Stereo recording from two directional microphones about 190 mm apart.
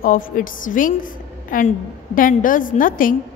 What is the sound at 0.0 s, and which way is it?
A woman's voice, 45° left (ahead or behind).